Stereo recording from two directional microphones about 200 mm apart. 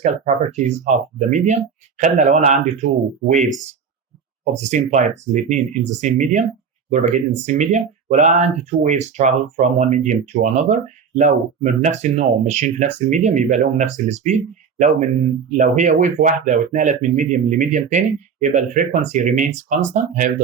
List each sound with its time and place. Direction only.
0.0 s speech: 35° right (ahead or behind)
4.5 s speech: 35° right (ahead or behind)